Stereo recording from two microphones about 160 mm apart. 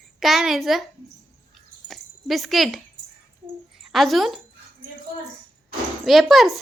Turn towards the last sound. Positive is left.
turn(degrees=0)  # may be behind; listen again after turning